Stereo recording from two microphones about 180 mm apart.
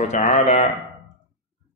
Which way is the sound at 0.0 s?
40° left (ahead or behind).